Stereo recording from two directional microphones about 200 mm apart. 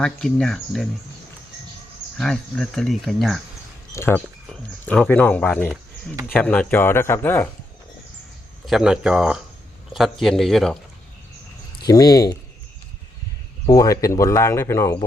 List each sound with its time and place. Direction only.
0.0 s speech: 5° left (ahead or behind)
2.1 s speech: centre (ahead or behind)
3.9 s speech: 10° left (ahead or behind)
8.6 s speech: 5° right (ahead or behind)
11.9 s speech: 20° left (ahead or behind)
13.7 s speech: 15° left (ahead or behind)